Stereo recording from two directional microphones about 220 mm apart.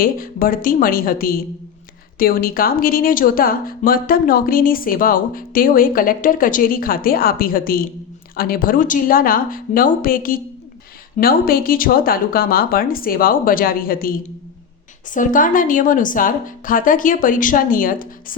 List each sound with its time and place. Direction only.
0.0 s speech: 40° left (ahead or behind)
15.1 s speech: 35° left (ahead or behind)